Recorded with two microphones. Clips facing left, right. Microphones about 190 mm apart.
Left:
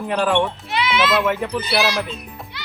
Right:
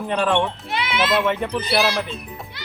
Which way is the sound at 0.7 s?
50° right (ahead or behind).